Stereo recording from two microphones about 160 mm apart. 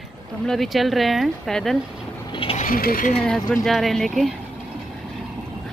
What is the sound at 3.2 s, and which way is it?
Speech, 5° left (ahead or behind).